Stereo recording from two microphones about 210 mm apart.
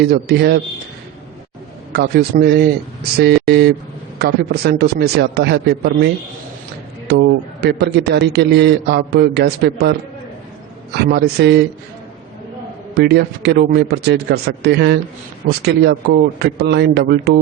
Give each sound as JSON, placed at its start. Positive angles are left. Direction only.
{"t": 0.0, "sound": "a man's voice", "side_deg": -50}
{"t": 1.9, "sound": "a man's voice", "side_deg": -50}
{"t": 7.1, "sound": "a man's voice", "side_deg": -50}
{"t": 11.0, "sound": "a man's voice", "side_deg": -50}
{"t": 12.9, "sound": "a man's voice", "side_deg": -50}